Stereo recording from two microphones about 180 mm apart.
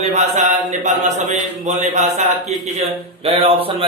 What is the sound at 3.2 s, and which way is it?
Speech, 30° right (ahead or behind).